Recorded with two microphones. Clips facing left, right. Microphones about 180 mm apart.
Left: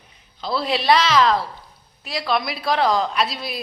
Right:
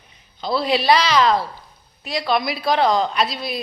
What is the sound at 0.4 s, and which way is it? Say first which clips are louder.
A woman's voice: right 2 dB; centre (ahead or behind).